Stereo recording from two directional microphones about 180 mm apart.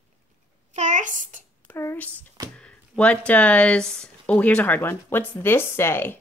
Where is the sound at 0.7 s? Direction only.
45° right (ahead or behind).